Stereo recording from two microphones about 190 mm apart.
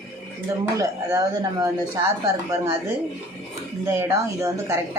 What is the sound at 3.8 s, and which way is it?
Speech, 15° right (ahead or behind).